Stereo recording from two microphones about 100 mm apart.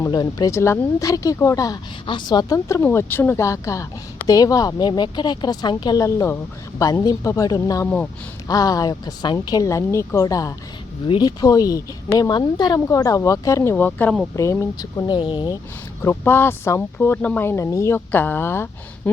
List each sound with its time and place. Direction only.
0.0 s speech: 40° left (ahead or behind)
0.5 s speech: 30° left (ahead or behind)
2.0 s a woman's voice: 50° left (ahead or behind)
2.8 s a woman's voice: 25° left (ahead or behind); by 6.0 s 45° left (ahead or behind)
6.0 s speech: 30° left (ahead or behind)
12.8 s speech: 30° left (ahead or behind)
14.3 s speech: 30° left (ahead or behind)
15.0 s speech: 55° left (ahead or behind)
16.0 s speech: 25° left (ahead or behind)